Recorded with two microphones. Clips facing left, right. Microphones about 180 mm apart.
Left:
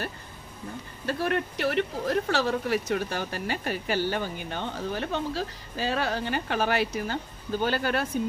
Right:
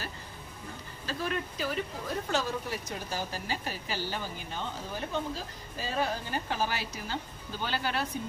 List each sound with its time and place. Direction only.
1.0 s speech: 65° left (ahead or behind)